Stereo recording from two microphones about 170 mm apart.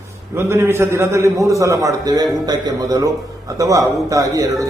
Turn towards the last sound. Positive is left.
turn(degrees=-20)  # may be behind; listen again after turning